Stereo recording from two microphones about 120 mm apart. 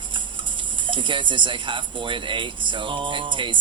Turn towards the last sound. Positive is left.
turn(degrees=-45)  # may be behind; listen again after turning